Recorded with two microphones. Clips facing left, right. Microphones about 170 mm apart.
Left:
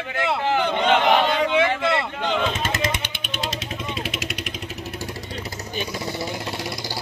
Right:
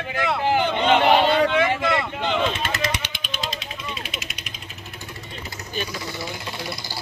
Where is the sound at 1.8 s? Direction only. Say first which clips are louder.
Even; 25° left (ahead or behind).